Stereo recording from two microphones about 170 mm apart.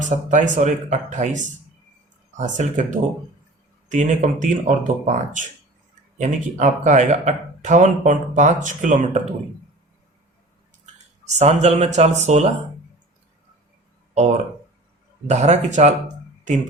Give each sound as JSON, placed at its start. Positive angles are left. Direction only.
{"t": 0.0, "sound": "speech", "side_deg": -45}
{"t": 3.8, "sound": "speech", "side_deg": -45}
{"t": 11.3, "sound": "speech", "side_deg": -40}
{"t": 14.1, "sound": "speech", "side_deg": -40}